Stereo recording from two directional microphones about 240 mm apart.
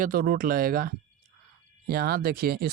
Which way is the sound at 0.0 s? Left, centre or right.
Right.